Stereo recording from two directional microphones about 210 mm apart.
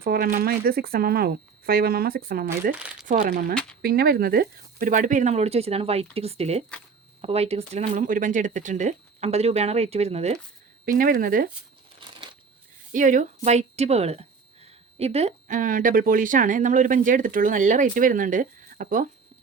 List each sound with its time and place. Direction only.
0.0 s speech: 45° right (ahead or behind)
2.7 s speech: 5° right (ahead or behind)
3.1 s speech: 40° right (ahead or behind)
10.8 s speech: 40° right (ahead or behind)
12.9 s speech: 40° right (ahead or behind)